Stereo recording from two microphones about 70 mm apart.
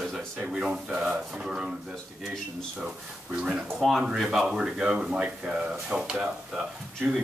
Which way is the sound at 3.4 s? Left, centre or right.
Centre.